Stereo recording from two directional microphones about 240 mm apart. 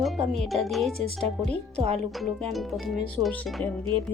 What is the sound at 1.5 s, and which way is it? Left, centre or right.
Speech, right.